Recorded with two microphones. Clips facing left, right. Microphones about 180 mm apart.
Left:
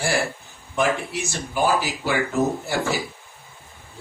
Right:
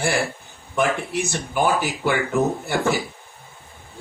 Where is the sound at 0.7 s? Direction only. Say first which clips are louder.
Right 1 dB; 55° right (ahead or behind).